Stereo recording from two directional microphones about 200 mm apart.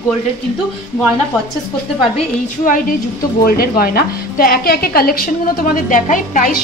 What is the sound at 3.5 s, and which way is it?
A woman's voice, 50° left (ahead or behind).